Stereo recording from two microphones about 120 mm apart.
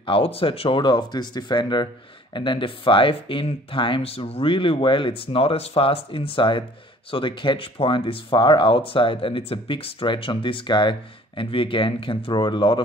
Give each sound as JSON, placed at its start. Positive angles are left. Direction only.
{"t": 0.0, "sound": "speech", "side_deg": 50}